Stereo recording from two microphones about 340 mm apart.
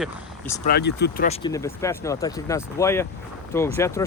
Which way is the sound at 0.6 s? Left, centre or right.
Left.